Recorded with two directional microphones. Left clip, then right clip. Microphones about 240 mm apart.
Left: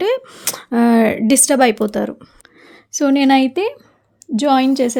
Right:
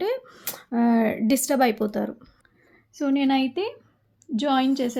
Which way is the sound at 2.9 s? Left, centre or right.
Left.